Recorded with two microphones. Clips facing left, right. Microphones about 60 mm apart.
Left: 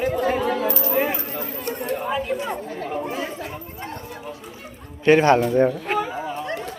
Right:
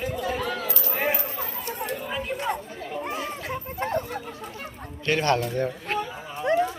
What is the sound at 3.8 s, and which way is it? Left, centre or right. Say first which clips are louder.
Speech: right 9 dB; right.